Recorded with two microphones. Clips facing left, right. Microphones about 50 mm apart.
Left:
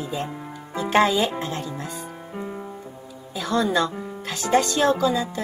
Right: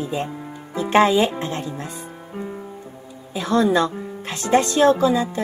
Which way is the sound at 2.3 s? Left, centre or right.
Centre.